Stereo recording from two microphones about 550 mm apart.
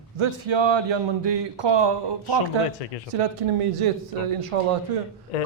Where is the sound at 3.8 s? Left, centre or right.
Right.